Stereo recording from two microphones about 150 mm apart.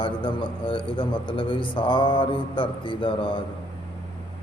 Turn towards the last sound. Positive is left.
turn(degrees=35)  # may be behind; listen again after turning